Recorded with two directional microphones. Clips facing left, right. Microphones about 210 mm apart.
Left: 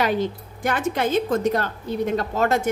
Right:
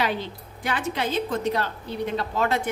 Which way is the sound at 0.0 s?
45° left (ahead or behind).